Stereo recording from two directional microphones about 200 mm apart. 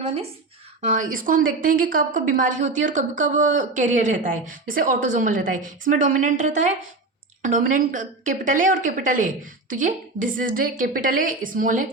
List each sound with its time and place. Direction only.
0.0 s a woman's voice: 30° right (ahead or behind)